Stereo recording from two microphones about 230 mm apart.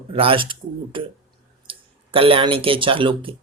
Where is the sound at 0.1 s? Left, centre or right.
Right.